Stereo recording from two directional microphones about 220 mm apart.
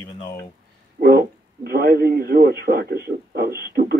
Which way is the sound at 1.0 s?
45° right (ahead or behind).